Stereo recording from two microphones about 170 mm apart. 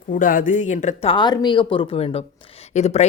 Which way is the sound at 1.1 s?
25° left (ahead or behind).